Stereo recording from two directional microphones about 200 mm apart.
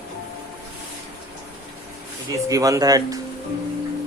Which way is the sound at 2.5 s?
15° right (ahead or behind).